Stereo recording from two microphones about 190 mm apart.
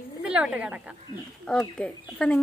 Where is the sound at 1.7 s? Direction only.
5° left (ahead or behind).